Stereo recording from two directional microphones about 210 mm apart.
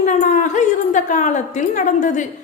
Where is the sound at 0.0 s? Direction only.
35° left (ahead or behind).